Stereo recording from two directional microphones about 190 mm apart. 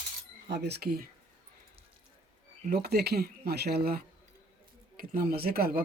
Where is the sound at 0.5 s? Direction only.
60° right (ahead or behind).